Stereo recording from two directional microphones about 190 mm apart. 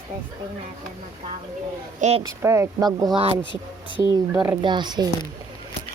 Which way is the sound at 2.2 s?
15° right (ahead or behind).